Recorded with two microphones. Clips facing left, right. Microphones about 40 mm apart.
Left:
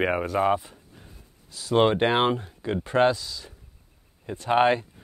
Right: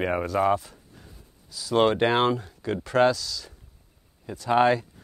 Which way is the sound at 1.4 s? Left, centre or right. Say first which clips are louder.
Right 1 dB; left.